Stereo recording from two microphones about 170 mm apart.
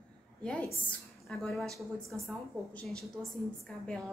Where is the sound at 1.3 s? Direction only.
Centre (ahead or behind).